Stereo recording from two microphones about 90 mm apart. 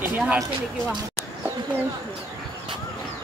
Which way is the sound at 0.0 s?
20° right (ahead or behind).